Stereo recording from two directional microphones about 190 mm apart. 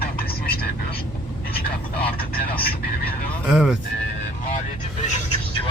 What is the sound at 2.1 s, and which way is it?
Speech, 50° left (ahead or behind).